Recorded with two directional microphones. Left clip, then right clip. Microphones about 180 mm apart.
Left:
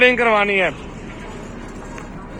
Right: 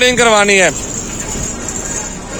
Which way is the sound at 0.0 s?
25° right (ahead or behind).